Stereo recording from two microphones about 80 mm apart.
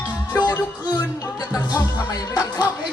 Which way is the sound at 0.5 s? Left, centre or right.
Left.